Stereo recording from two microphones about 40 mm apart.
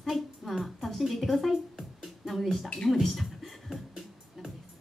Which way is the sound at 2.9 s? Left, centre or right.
Centre.